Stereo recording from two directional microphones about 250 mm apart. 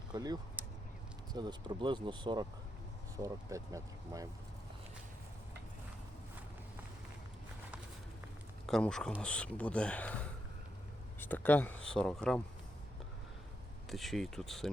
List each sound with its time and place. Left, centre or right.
0.1 s speech: centre
8.6 s speech: centre
13.9 s speech: centre